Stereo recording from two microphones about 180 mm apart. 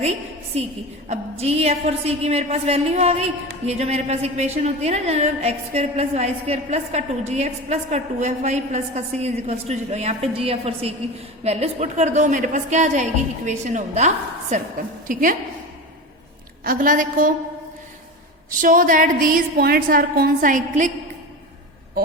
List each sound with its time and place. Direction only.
0.0 s a sound: 35° right (ahead or behind)
1.0 s a woman's voice: 35° right (ahead or behind)
16.6 s a woman's voice: 50° right (ahead or behind)
18.6 s a woman's voice: 50° right (ahead or behind)